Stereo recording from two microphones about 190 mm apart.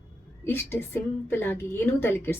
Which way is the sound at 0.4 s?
10° left (ahead or behind).